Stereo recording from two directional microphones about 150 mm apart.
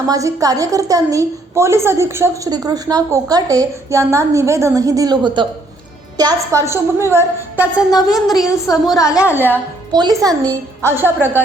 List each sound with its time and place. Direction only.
0.1 s a woman's voice: 20° right (ahead or behind)
7.9 s speech: 25° left (ahead or behind)
9.3 s a woman's voice: 15° right (ahead or behind)
9.9 s a woman's voice: 25° right (ahead or behind)